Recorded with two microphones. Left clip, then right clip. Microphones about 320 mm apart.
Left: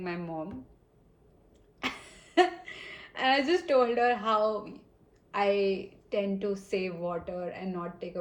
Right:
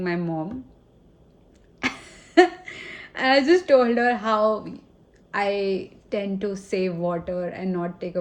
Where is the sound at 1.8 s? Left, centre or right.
Right.